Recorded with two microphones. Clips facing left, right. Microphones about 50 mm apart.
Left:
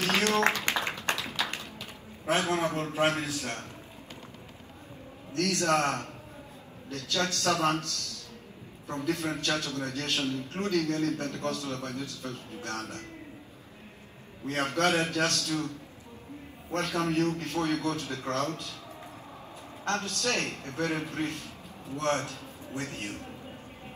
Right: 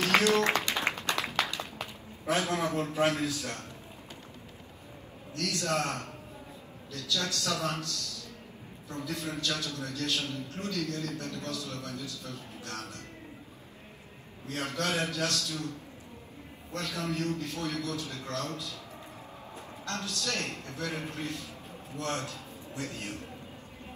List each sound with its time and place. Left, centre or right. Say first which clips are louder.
0.2 s a sound: right 1 dB; left
0.7 s a sound: even; right
2.2 s a man's voice: left 2 dB; left
5.3 s a man's voice: left 5 dB; left
14.4 s a man's voice: left 6 dB; left
19.8 s a man's voice: left 6 dB; left